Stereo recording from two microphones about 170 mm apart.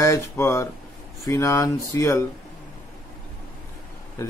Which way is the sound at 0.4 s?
15° left (ahead or behind).